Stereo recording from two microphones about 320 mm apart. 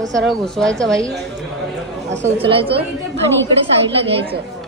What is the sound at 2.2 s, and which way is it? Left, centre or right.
Speech, centre.